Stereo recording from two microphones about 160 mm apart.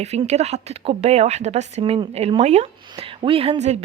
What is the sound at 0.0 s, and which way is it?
Speech, 40° right (ahead or behind).